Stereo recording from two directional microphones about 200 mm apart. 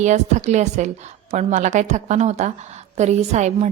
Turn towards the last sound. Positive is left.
turn(degrees=-35)  # may be behind; listen again after turning